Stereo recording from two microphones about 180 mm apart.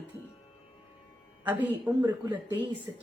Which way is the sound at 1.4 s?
10° right (ahead or behind).